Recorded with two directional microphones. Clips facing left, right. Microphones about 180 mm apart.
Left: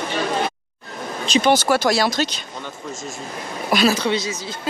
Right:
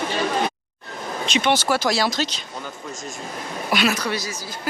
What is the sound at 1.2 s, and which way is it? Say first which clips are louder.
Speech: left 4 dB; 35° left (ahead or behind).